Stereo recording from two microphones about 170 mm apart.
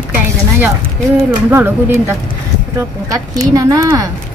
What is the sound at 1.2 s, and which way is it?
Speech, 15° right (ahead or behind).